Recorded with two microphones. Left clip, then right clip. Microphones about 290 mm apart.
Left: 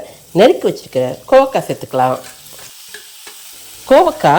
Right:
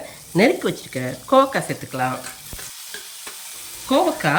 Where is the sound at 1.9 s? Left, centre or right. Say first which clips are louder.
Left 11 dB; left.